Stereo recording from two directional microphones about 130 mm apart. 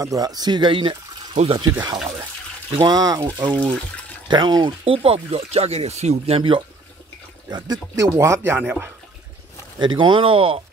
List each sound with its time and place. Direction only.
0.0 s speech: 30° right (ahead or behind); by 6.6 s 45° right (ahead or behind)
7.5 s speech: 30° right (ahead or behind); by 8.9 s 15° right (ahead or behind)
9.8 s speech: 35° right (ahead or behind)